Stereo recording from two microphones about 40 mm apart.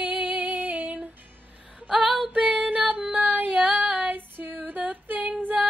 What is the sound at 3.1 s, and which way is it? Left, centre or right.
Female singing, right.